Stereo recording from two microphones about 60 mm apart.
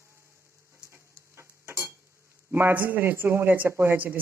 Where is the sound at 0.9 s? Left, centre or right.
Right.